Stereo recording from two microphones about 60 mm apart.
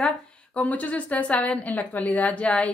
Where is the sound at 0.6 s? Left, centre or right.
Left.